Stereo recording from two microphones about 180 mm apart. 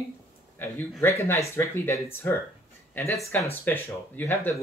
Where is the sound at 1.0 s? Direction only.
15° left (ahead or behind).